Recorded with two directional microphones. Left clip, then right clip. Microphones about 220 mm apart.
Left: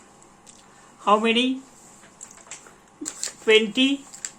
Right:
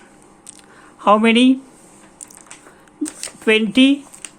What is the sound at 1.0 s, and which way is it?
Speech, 55° right (ahead or behind).